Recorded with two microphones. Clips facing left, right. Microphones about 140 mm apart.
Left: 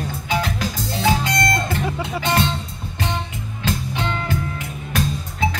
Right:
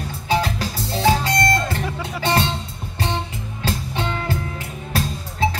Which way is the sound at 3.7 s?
35° right (ahead or behind).